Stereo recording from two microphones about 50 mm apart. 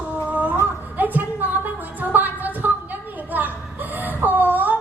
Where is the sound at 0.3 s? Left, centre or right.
Right.